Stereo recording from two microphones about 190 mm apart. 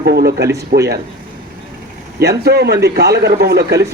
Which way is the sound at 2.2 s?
60° right (ahead or behind).